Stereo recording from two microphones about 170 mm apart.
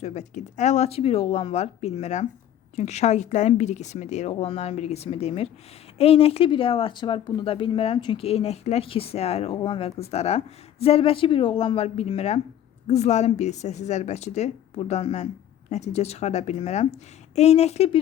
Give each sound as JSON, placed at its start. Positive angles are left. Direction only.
{"t": 0.0, "sound": "speech", "side_deg": 40}